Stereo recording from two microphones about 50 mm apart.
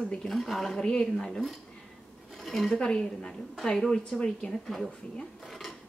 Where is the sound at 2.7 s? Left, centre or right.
Centre.